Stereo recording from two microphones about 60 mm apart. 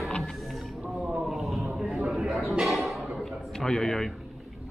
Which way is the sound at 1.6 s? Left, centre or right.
Centre.